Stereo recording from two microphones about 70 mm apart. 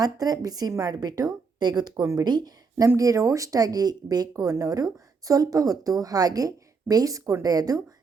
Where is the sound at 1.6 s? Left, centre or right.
Right.